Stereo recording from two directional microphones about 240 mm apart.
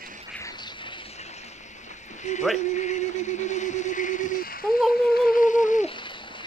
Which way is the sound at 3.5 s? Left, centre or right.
Left.